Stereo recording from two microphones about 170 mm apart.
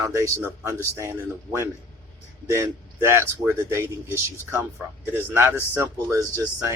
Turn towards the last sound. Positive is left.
turn(degrees=-15)  # may be behind; listen again after turning